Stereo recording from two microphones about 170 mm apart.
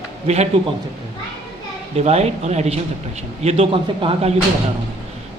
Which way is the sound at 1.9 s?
40° right (ahead or behind).